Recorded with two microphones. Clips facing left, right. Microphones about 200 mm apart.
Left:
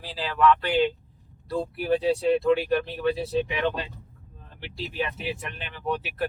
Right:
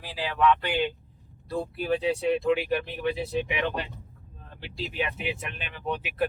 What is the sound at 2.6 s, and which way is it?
Speech, 15° right (ahead or behind).